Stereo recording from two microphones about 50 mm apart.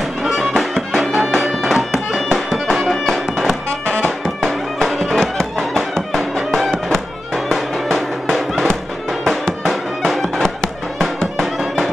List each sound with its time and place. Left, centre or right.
0.2 s music: centre
3.8 s music: left
4.4 s music: centre